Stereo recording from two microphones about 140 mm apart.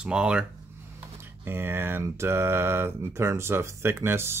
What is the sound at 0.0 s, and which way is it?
Speech, 5° right (ahead or behind).